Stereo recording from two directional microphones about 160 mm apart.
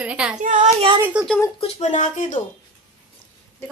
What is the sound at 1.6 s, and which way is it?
Speech, 45° left (ahead or behind).